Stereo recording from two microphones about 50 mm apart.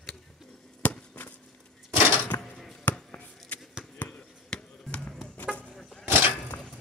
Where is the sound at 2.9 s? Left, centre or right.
Left.